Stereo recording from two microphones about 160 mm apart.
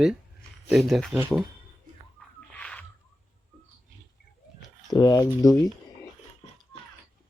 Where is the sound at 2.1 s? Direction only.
5° left (ahead or behind).